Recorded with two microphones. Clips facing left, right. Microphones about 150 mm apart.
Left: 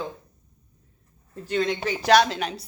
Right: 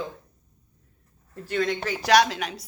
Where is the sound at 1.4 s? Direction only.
25° left (ahead or behind).